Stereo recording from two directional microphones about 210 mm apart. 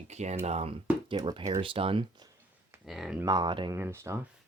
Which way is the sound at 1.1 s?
20° right (ahead or behind).